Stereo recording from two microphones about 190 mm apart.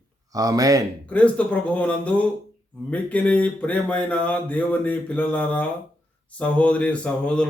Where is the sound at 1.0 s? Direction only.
5° left (ahead or behind).